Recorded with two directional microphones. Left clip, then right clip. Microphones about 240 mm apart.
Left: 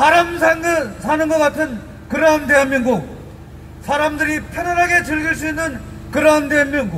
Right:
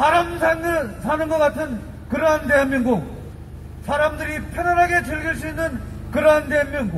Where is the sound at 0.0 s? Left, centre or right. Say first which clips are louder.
Left 5 dB; left.